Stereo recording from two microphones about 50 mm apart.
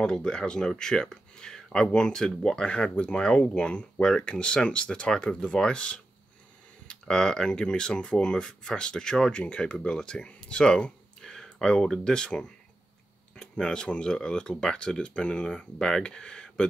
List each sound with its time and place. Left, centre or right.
0.0 s speech: centre